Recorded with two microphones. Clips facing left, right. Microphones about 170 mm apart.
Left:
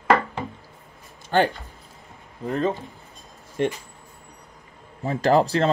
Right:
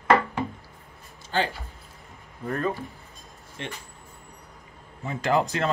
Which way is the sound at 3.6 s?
50° left (ahead or behind).